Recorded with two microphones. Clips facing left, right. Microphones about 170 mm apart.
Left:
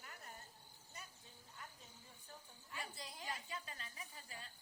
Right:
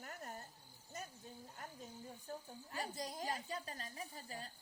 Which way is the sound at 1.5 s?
45° right (ahead or behind).